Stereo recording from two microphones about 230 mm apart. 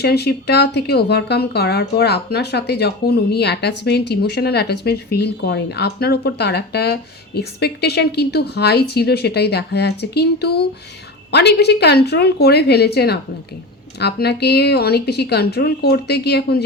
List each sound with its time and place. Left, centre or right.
0.0 s speech: left